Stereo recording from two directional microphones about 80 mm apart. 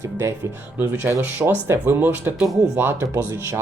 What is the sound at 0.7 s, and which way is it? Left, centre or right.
Speech, right.